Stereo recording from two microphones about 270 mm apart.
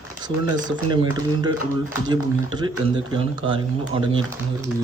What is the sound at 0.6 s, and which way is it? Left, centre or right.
Speech, centre.